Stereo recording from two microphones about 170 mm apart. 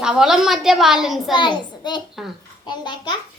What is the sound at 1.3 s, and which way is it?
A child's voice, 25° left (ahead or behind).